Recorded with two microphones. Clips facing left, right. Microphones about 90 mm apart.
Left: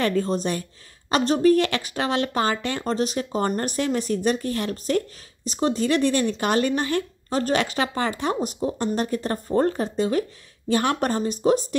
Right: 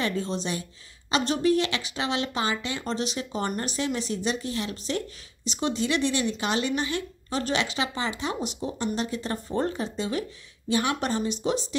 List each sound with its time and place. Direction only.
0.0 s speech: 50° left (ahead or behind)